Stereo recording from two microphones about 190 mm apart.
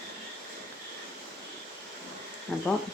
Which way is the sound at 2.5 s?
Centre (ahead or behind).